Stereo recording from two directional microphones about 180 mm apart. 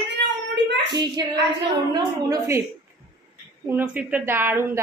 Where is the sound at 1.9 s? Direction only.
20° right (ahead or behind).